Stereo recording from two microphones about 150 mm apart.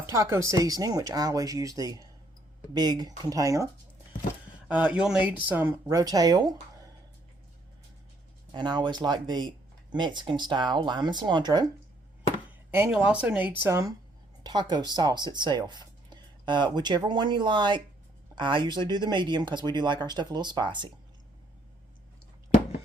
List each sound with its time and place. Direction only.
0.0 s speech: 20° right (ahead or behind)
4.7 s speech: 10° right (ahead or behind)
5.9 s speech: 25° right (ahead or behind)
8.5 s speech: 30° right (ahead or behind)
12.7 s speech: 15° right (ahead or behind)
14.4 s speech: 30° right (ahead or behind)